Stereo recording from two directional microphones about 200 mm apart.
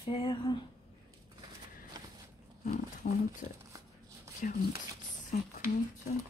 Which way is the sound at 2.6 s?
40° left (ahead or behind).